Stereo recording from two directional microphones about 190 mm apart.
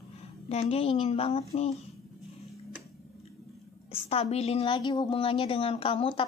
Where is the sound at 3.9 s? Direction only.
30° left (ahead or behind).